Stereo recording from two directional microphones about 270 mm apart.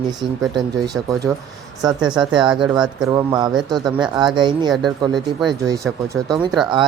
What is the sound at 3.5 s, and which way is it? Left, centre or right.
Speech, centre.